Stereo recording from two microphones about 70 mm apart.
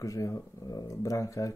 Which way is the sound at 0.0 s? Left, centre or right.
Left.